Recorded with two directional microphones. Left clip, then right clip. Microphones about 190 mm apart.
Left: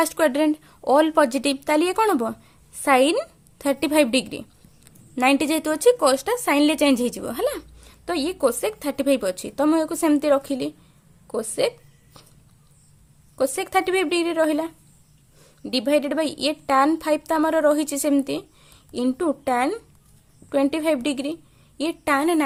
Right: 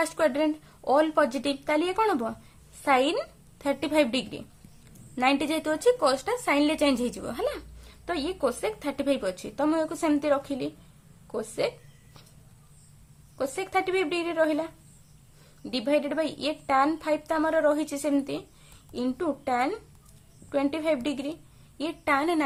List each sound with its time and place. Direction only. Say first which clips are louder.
0.0 s a woman's voice: left 5 dB; 40° left (ahead or behind)
13.3 s a woman's voice: left 6 dB; 45° left (ahead or behind)